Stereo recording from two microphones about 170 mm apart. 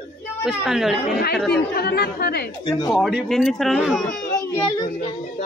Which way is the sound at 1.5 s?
70° left (ahead or behind).